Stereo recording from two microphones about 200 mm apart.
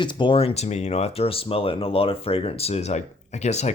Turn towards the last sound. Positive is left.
turn(degrees=35)  # may be behind; listen again after turning